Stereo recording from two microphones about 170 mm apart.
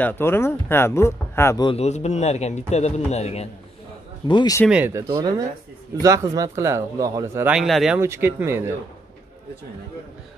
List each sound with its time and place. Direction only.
0.0 s speech: 15° left (ahead or behind)
1.6 s a man's voice: 35° left (ahead or behind)
4.3 s speech: 25° left (ahead or behind)
4.6 s speech: 10° right (ahead or behind)
7.4 s speech: centre (ahead or behind)
8.0 s speech: 15° right (ahead or behind)